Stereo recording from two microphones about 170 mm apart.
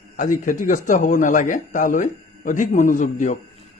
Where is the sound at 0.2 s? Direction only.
50° left (ahead or behind).